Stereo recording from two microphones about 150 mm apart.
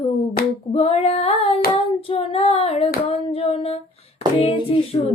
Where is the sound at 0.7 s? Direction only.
40° left (ahead or behind).